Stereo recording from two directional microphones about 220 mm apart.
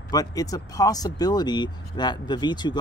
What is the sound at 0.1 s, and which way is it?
Speech, 15° left (ahead or behind).